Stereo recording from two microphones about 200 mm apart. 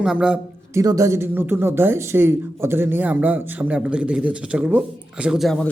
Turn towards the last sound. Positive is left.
turn(degrees=0)  # may be behind; listen again after turning